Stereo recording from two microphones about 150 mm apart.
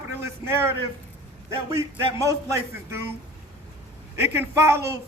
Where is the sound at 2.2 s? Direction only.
20° right (ahead or behind).